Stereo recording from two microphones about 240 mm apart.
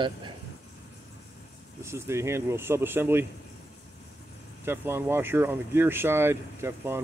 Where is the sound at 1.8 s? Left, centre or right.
Centre.